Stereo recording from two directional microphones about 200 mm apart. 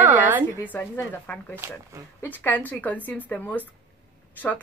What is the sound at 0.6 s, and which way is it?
Speech, 10° left (ahead or behind).